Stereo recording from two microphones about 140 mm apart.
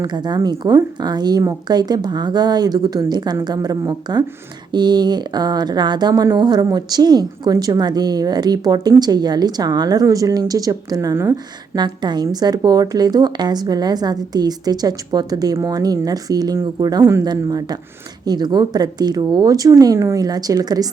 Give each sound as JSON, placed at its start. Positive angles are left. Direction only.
{"t": 0.0, "sound": "speech", "side_deg": -30}